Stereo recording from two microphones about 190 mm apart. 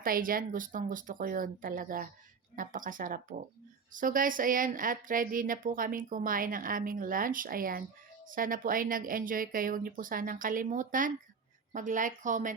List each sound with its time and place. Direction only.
0.0 s speech: 50° right (ahead or behind)